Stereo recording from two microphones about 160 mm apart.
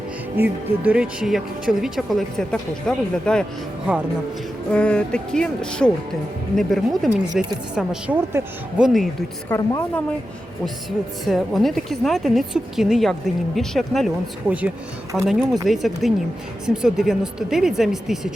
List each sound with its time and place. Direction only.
0.3 s speech: 10° right (ahead or behind); by 3.4 s 5° left (ahead or behind)
3.9 s speech: 10° right (ahead or behind)
4.7 s speech: 5° left (ahead or behind); by 8.4 s 15° right (ahead or behind)
8.8 s speech: centre (ahead or behind)
9.5 s speech: 20° left (ahead or behind)
11.3 s speech: centre (ahead or behind)
14.4 s speech: 10° right (ahead or behind)